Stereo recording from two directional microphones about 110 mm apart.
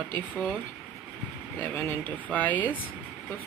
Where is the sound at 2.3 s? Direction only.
15° left (ahead or behind).